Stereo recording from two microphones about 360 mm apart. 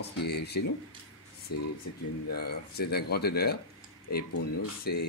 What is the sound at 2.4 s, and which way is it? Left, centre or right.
Speech, left.